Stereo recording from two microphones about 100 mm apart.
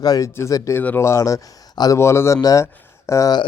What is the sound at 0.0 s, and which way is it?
Speech, 40° left (ahead or behind).